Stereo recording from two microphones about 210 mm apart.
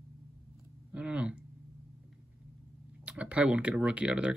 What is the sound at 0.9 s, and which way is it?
Speech, 5° right (ahead or behind).